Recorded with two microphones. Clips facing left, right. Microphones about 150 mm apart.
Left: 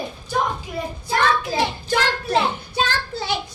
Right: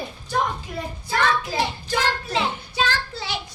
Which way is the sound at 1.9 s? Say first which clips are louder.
Left 3 dB; 50° left (ahead or behind).